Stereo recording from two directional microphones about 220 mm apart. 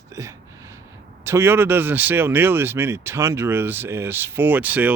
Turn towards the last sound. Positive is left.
turn(degrees=-5)  # may be behind; listen again after turning